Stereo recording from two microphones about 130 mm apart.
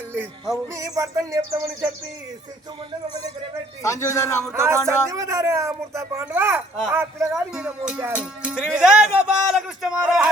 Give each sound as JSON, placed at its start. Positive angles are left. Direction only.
{"t": 0.5, "sound": "speech", "side_deg": -25}
{"t": 3.8, "sound": "a man's voice", "side_deg": 20}
{"t": 4.5, "sound": "speech", "side_deg": -20}
{"t": 7.5, "sound": "speech", "side_deg": -5}